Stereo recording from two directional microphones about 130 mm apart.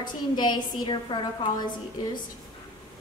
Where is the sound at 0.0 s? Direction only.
35° left (ahead or behind).